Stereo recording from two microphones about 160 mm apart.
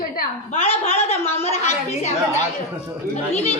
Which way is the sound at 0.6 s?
40° left (ahead or behind).